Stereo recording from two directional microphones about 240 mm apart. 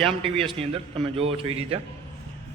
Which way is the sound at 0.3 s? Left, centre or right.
Right.